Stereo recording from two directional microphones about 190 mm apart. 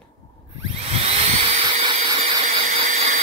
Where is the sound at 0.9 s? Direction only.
30° right (ahead or behind).